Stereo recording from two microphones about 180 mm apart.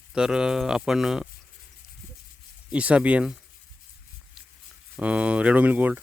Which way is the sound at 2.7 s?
5° right (ahead or behind).